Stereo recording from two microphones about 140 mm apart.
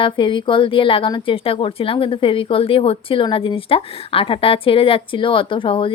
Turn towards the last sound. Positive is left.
turn(degrees=40)  # may be behind; listen again after turning